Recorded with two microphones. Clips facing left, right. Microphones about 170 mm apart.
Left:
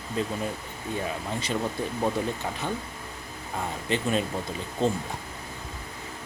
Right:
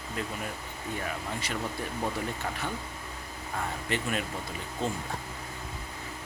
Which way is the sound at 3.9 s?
25° left (ahead or behind).